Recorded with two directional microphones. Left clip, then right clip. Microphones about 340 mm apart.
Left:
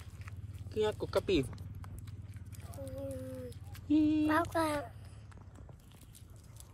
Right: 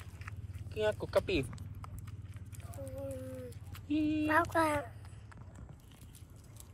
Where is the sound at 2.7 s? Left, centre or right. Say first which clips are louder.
Even; centre.